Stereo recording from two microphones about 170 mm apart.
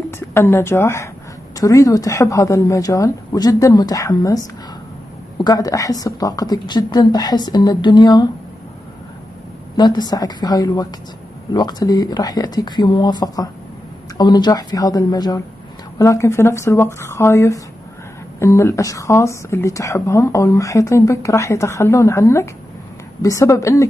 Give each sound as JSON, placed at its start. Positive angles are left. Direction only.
{"t": 0.3, "sound": "a woman's voice", "side_deg": 15}
{"t": 9.8, "sound": "a woman's voice", "side_deg": 25}